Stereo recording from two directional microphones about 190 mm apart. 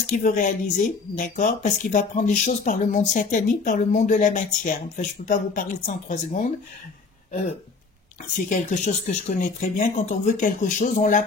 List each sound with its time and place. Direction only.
0.0 s speech: 45° left (ahead or behind)
8.5 s speech: 45° left (ahead or behind)